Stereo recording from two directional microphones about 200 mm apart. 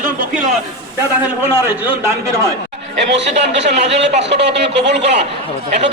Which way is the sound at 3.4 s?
60° right (ahead or behind).